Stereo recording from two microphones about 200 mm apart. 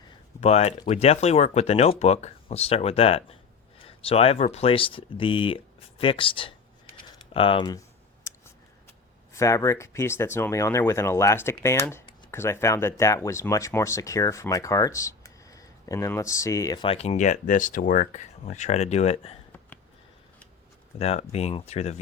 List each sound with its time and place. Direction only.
0.3 s speech: 30° left (ahead or behind)
6.9 s typing: 25° left (ahead or behind)
9.3 s speech: 15° left (ahead or behind)
21.0 s speech: 30° left (ahead or behind)